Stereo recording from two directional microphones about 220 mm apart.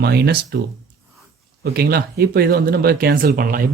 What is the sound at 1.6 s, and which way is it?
Speech, 45° right (ahead or behind).